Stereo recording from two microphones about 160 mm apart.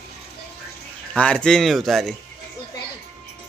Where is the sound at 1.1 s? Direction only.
5° left (ahead or behind).